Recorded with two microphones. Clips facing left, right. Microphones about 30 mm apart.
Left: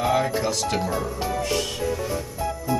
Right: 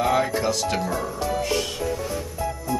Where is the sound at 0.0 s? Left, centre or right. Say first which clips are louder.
Right 1 dB; centre.